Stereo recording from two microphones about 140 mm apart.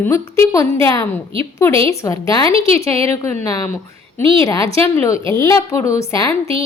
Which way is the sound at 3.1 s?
20° left (ahead or behind).